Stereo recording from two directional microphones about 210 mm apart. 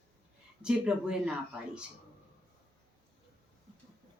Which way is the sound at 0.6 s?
5° right (ahead or behind).